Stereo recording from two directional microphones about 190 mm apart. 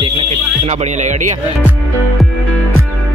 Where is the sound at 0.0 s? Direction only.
30° right (ahead or behind).